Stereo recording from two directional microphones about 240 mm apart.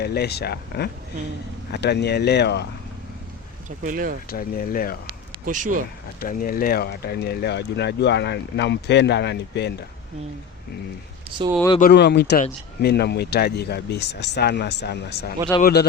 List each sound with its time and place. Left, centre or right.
0.0 s speech: left
3.8 s speech: right
4.3 s speech: left
5.5 s speech: right
6.1 s speech: left
11.8 s speech: left